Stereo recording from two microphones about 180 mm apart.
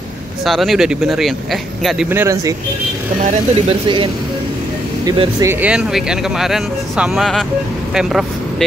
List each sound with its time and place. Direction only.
0.5 s speech: centre (ahead or behind)
2.0 s speech: 15° right (ahead or behind)
3.2 s speech: 45° right (ahead or behind)
5.0 s speech: 30° right (ahead or behind)
5.4 s speech: 10° right (ahead or behind)